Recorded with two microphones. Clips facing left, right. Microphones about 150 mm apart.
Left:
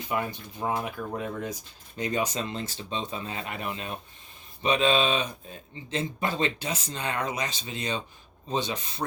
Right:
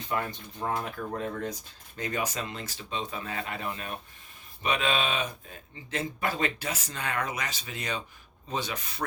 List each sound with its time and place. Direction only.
0.1 s speech: 15° left (ahead or behind)